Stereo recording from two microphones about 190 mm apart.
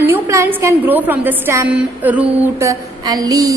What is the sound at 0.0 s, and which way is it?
A woman's voice, 15° right (ahead or behind).